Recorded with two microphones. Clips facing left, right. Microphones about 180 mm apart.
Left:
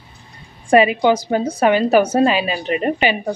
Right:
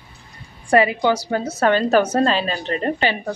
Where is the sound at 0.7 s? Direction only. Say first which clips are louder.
Left 3 dB; 20° left (ahead or behind).